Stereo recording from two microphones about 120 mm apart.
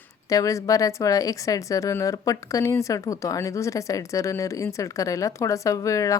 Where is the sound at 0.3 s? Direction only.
25° left (ahead or behind).